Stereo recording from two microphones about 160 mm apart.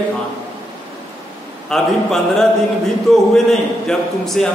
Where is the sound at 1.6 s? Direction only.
Centre (ahead or behind).